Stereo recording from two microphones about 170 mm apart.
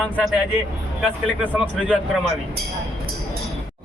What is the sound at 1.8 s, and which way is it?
Speech, 5° left (ahead or behind).